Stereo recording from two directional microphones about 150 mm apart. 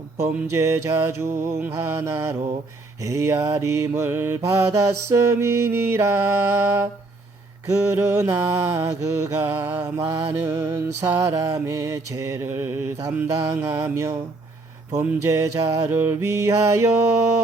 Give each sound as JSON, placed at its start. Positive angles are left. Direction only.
{"t": 0.2, "sound": "music", "side_deg": -20}
{"t": 7.9, "sound": "mantra", "side_deg": -15}
{"t": 9.4, "sound": "music", "side_deg": -15}
{"t": 14.9, "sound": "mantra", "side_deg": -20}